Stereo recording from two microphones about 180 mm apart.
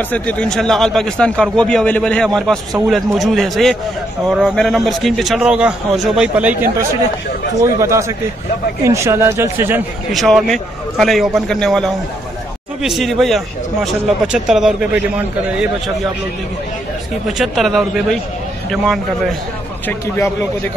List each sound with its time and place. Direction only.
0.1 s a man's voice: 5° left (ahead or behind); by 9.8 s 15° right (ahead or behind)
10.1 s a man's voice: centre (ahead or behind)
17.3 s a man's voice: centre (ahead or behind)